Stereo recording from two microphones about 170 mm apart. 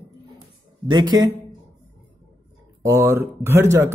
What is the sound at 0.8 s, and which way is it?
Speech, 25° right (ahead or behind).